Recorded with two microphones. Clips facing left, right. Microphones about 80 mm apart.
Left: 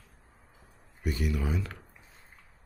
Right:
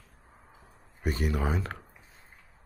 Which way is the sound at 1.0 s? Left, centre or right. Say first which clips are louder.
Right 2 dB; right.